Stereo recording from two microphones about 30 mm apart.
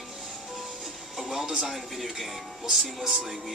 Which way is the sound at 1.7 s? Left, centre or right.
Centre.